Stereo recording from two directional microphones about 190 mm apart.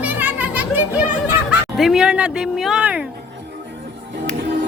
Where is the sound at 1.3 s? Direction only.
5° right (ahead or behind).